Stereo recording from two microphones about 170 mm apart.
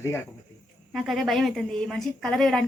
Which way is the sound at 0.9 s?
Centre (ahead or behind).